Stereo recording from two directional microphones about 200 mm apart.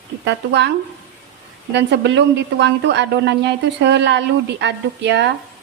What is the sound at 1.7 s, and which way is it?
Speech, 60° right (ahead or behind).